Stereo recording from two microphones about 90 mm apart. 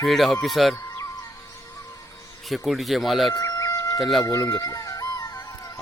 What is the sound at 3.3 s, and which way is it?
Chicken, 35° left (ahead or behind).